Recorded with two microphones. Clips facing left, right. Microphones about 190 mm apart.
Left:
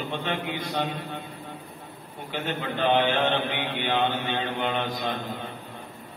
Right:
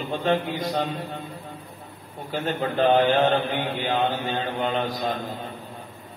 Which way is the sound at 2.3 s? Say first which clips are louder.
Right 4 dB; 40° right (ahead or behind).